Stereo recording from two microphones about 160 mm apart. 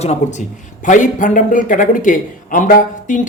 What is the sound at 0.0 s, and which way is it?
A man's voice, 45° left (ahead or behind).